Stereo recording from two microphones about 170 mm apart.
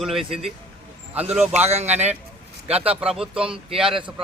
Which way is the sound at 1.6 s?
40° right (ahead or behind).